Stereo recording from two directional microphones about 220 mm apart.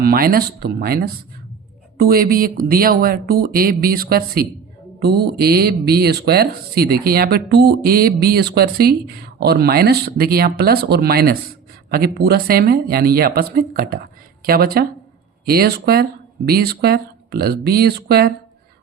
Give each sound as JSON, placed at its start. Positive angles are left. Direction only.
{"t": 0.0, "sound": "speech", "side_deg": -40}